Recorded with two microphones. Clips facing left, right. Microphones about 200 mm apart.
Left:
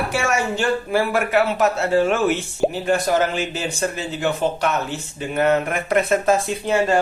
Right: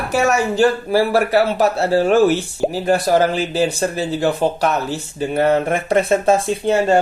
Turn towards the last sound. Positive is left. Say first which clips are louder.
# right 3 dB
turn(degrees=-30)  # may be behind; listen again after turning